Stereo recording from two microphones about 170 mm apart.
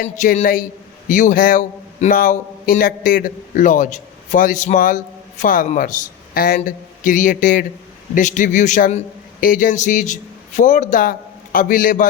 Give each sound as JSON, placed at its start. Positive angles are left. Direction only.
{"t": 0.0, "sound": "a man's voice", "side_deg": 45}
{"t": 6.6, "sound": "a man's voice", "side_deg": 50}